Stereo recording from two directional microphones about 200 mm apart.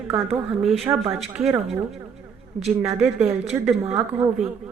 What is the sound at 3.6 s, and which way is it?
Speech, 5° right (ahead or behind).